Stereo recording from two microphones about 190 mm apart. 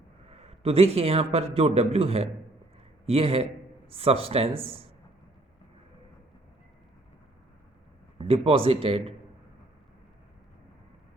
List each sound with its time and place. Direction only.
0.3 s a man's voice: 30° right (ahead or behind)
8.3 s speech: 30° right (ahead or behind)